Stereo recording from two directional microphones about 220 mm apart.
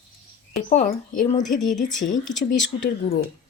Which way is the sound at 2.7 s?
25° left (ahead or behind).